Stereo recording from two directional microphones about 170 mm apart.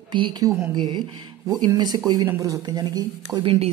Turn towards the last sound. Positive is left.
turn(degrees=-30)  # may be behind; listen again after turning